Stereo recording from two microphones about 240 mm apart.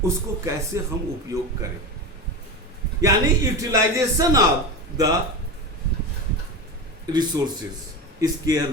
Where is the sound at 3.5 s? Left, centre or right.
Centre.